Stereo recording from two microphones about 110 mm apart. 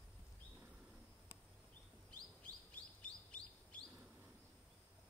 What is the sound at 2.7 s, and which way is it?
Bird vocalization, 10° left (ahead or behind).